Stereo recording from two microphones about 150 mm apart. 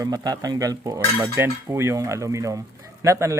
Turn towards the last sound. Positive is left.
turn(degrees=-20)  # may be behind; listen again after turning